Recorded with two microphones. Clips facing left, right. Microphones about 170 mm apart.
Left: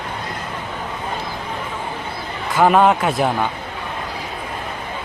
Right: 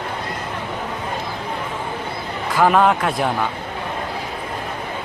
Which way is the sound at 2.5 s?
Centre (ahead or behind).